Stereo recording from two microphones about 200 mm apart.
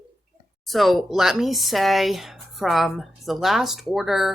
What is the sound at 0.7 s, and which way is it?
Speech, centre (ahead or behind).